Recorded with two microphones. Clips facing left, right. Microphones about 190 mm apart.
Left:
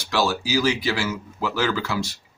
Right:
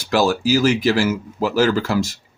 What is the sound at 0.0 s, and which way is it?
Speech, 45° right (ahead or behind).